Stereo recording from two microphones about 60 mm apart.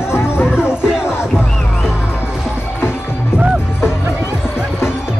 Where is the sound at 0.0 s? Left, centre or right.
Left.